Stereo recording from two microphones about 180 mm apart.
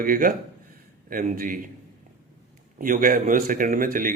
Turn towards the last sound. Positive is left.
turn(degrees=-50)  # may be behind; listen again after turning